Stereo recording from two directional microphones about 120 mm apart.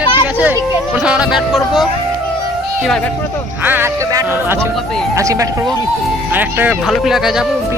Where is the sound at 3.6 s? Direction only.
15° right (ahead or behind).